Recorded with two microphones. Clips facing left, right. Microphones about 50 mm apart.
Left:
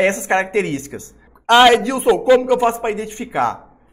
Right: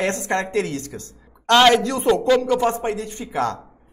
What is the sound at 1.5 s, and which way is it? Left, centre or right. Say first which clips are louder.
Speech: left 4 dB; centre.